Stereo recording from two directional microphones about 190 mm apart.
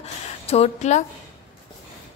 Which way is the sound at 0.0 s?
35° left (ahead or behind).